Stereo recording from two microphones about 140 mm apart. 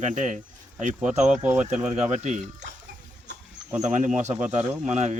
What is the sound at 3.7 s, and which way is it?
Speech, 60° right (ahead or behind).